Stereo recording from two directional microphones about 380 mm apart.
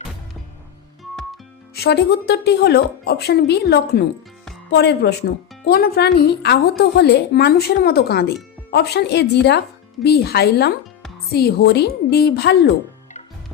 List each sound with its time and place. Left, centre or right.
1.7 s a woman's voice: left